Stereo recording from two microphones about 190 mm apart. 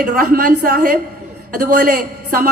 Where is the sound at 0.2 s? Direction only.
50° right (ahead or behind).